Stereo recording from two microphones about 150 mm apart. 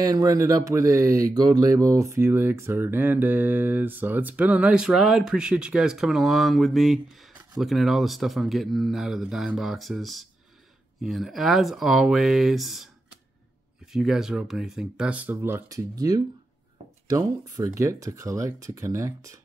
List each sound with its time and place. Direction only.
0.0 s speech: 25° right (ahead or behind)
1.9 s mantra: 20° right (ahead or behind); by 12.9 s centre (ahead or behind)
13.9 s speech: 5° right (ahead or behind); by 19.3 s 20° right (ahead or behind)